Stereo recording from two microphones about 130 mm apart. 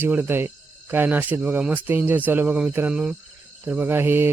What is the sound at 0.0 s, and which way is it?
Speech, 15° right (ahead or behind).